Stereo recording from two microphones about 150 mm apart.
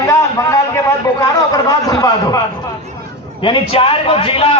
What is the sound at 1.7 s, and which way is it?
Speech, 25° left (ahead or behind).